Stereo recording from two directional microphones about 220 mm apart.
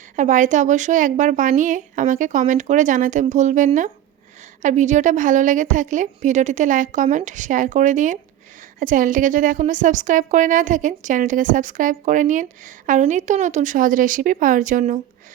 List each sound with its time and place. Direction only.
0.2 s a woman's voice: 35° right (ahead or behind)